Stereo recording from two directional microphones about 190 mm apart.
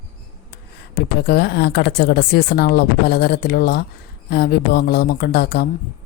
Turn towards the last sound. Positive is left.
turn(degrees=55)  # may be behind; listen again after turning